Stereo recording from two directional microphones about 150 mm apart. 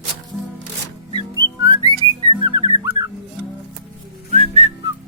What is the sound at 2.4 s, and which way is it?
Music, 25° right (ahead or behind).